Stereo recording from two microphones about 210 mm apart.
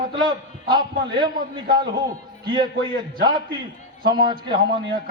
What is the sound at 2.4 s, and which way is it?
Speech, 20° right (ahead or behind).